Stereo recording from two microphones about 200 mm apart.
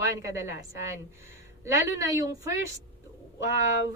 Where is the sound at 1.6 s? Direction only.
15° right (ahead or behind).